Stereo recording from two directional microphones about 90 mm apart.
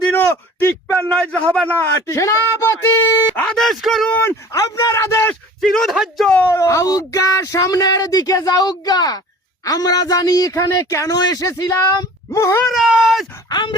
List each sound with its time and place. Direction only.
0.1 s a sound: 25° left (ahead or behind)
1.1 s a sound: 10° left (ahead or behind)
1.8 s a man's voice: 35° left (ahead or behind)
3.4 s speech: 5° left (ahead or behind)
4.1 s speech: 25° left (ahead or behind)
4.5 s a man's voice: 40° left (ahead or behind)
5.5 s a man's voice: centre (ahead or behind)
6.5 s a man's voice: 35° left (ahead or behind)
12.6 s a man's voice: 5° right (ahead or behind)
13.5 s speech: 55° left (ahead or behind)